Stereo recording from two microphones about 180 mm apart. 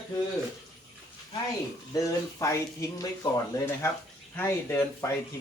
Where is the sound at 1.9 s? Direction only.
15° left (ahead or behind).